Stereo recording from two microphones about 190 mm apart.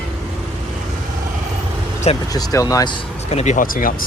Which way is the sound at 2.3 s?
20° left (ahead or behind).